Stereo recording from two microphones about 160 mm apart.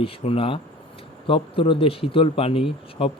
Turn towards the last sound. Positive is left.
turn(degrees=35)  # may be behind; listen again after turning